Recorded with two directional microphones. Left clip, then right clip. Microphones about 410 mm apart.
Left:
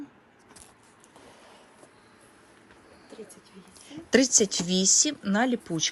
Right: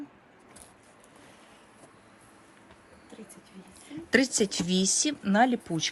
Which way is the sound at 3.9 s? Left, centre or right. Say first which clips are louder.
Left 3 dB; centre.